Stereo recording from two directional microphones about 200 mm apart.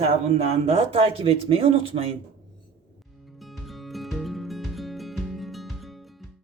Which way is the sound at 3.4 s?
Centre (ahead or behind).